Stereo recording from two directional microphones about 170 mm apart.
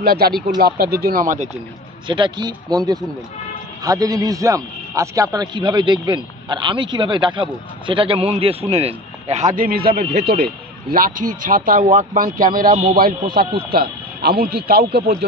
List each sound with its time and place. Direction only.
0.0 s speech: 65° right (ahead or behind)
2.0 s a man's voice: 30° right (ahead or behind); by 15.2 s 70° right (ahead or behind)